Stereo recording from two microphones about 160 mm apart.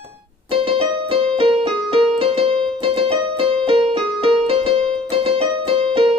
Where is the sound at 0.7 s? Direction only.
35° right (ahead or behind).